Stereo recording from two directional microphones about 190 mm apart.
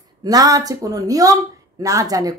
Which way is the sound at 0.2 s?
20° right (ahead or behind).